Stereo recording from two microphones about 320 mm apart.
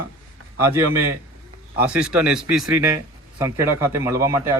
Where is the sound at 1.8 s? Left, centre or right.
Centre.